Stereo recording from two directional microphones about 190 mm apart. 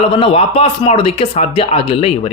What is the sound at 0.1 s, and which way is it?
Speech, 30° left (ahead or behind).